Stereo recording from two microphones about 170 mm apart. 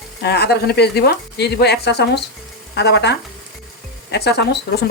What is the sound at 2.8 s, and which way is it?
A man's voice, 90° left.